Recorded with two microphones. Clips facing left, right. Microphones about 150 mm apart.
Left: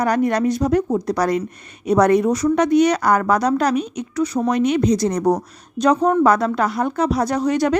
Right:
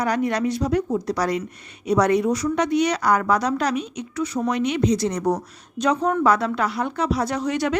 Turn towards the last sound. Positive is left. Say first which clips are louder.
# left 5 dB
turn(degrees=40)  # may be behind; listen again after turning